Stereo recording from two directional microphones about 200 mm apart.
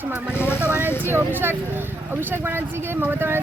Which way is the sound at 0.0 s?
10° right (ahead or behind).